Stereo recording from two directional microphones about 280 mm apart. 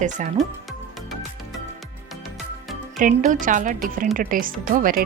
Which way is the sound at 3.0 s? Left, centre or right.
Right.